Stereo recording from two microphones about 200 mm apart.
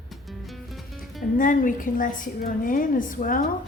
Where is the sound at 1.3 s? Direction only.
40° left (ahead or behind).